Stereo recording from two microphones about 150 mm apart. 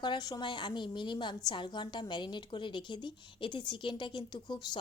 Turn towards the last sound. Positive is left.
turn(degrees=30)  # may be behind; listen again after turning